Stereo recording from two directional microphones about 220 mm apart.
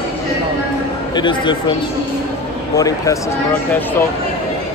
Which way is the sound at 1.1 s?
20° left (ahead or behind).